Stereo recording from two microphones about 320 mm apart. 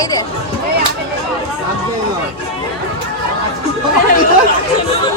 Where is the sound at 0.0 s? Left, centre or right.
Centre.